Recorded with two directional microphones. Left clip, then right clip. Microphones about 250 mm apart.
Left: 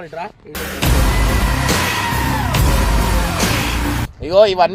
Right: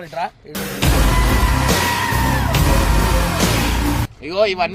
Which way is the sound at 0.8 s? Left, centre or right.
Centre.